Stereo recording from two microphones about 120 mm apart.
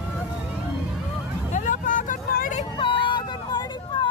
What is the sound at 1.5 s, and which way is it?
Vehicle, 90° left.